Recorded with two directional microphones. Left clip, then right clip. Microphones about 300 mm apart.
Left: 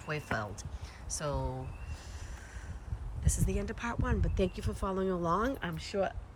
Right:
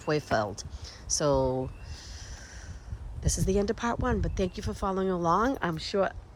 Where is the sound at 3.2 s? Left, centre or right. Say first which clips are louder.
Right 9 dB; centre.